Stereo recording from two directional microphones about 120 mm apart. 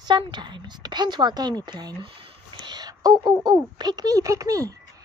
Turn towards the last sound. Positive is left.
turn(degrees=-30)  # may be behind; listen again after turning